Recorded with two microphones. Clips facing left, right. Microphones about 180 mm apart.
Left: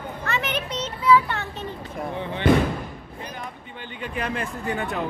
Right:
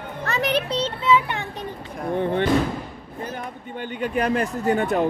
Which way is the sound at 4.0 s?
40° right (ahead or behind).